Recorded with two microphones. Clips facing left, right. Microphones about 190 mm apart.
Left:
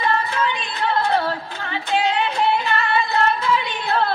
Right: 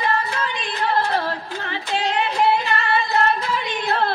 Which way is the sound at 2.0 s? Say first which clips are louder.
Left 1 dB; 35° right (ahead or behind).